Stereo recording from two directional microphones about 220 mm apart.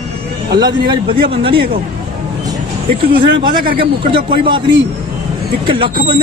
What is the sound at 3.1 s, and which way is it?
Speech, 45° right (ahead or behind).